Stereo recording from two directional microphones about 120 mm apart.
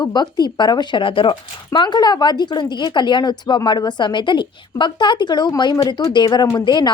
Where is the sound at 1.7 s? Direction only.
35° left (ahead or behind).